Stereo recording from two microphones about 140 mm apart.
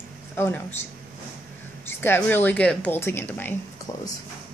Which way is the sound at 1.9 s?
15° left (ahead or behind).